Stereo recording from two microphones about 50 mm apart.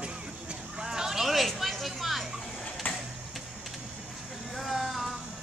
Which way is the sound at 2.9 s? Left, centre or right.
Left.